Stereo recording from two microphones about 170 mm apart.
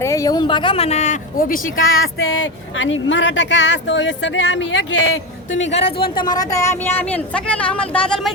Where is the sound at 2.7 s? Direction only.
90° left.